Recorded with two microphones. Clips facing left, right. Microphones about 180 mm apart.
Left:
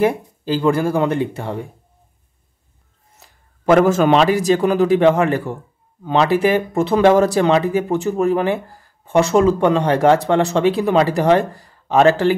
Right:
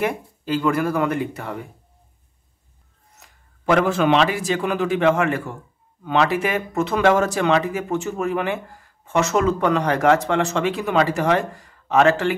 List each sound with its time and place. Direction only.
0.0 s speech: 35° left (ahead or behind)
3.2 s speech: 40° left (ahead or behind)